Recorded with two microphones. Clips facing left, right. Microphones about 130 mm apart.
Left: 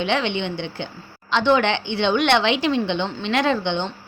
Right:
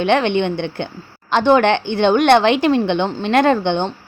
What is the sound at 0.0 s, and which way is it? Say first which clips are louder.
A woman's voice: right 7 dB; 50° right (ahead or behind).